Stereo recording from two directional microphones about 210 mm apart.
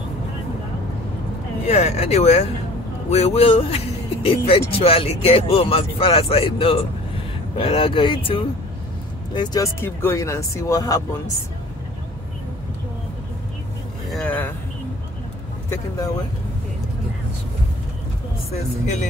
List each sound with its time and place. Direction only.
1.7 s speech: 30° left (ahead or behind)
14.1 s vehicle: 5° left (ahead or behind)
15.7 s speech: 15° left (ahead or behind)